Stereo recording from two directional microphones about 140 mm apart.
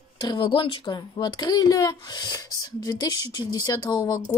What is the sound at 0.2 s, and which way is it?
Speech, 30° left (ahead or behind).